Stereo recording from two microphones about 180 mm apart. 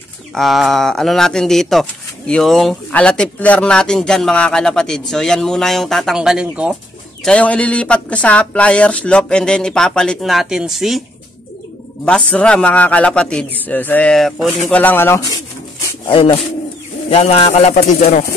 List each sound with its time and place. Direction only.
0.3 s speech: centre (ahead or behind)
7.2 s speech: 5° left (ahead or behind)
12.0 s speech: 5° left (ahead or behind)
17.1 s speech: 35° left (ahead or behind)